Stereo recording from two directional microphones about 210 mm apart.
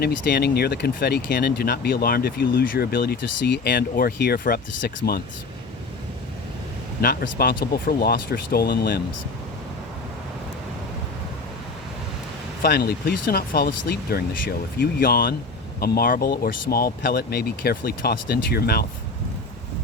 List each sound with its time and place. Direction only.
0.0 s speech: 50° left (ahead or behind)
7.0 s speech: 45° left (ahead or behind)
12.6 s speech: 50° left (ahead or behind)